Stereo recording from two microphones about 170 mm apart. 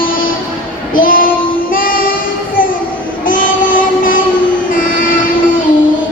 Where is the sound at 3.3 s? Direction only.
55° left (ahead or behind).